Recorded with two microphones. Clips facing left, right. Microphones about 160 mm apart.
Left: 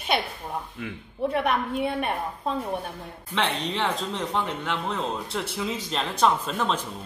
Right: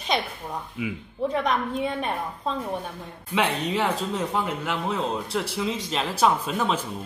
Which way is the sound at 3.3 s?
10° right (ahead or behind).